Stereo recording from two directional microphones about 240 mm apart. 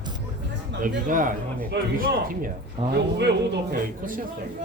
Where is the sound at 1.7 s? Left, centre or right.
Right.